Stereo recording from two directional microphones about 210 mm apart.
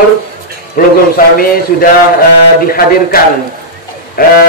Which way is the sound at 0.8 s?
40° left (ahead or behind).